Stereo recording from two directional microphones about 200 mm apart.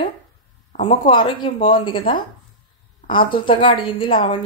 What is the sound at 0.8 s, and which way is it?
Speech, 25° left (ahead or behind).